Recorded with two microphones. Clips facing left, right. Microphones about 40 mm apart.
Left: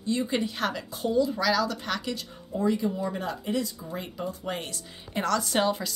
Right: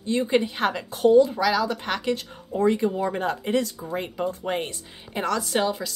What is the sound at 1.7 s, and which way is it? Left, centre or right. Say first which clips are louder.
Speech: right 5 dB; right.